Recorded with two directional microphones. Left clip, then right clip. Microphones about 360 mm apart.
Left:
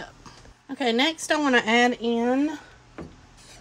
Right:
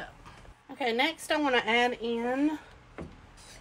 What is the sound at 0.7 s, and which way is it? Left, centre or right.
Speech, left.